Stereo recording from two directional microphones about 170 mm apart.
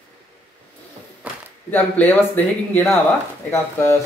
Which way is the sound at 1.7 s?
10° left (ahead or behind).